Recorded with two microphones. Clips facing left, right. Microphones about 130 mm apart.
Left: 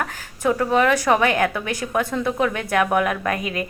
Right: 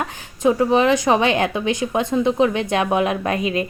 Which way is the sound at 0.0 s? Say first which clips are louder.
Right 4 dB; 20° right (ahead or behind).